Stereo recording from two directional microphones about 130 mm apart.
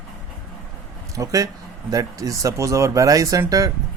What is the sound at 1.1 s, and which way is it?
Speech, 25° right (ahead or behind).